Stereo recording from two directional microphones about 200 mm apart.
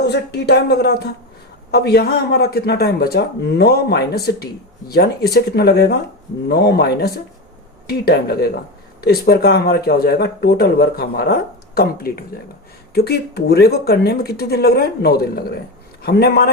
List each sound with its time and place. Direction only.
0.0 s speech: 55° left (ahead or behind)